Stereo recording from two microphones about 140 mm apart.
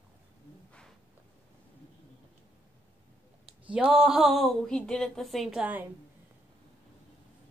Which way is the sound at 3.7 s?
5° right (ahead or behind).